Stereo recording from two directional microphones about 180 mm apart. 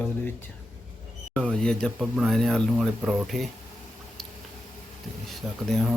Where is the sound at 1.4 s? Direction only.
5° left (ahead or behind).